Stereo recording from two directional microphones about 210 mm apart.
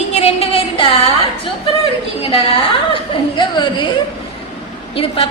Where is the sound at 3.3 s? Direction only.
20° left (ahead or behind).